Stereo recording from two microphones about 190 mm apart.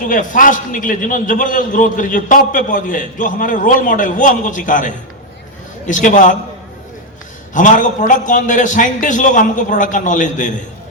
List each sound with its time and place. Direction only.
0.0 s a man's voice: 45° left (ahead or behind)
7.5 s a man's voice: 40° left (ahead or behind)